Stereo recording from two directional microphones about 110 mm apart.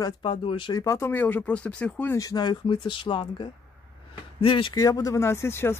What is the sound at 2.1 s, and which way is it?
Speech, 35° left (ahead or behind).